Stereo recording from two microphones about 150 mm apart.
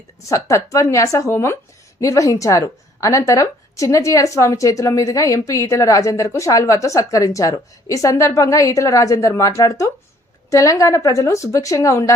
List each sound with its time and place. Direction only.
0.3 s a woman's voice: 20° left (ahead or behind)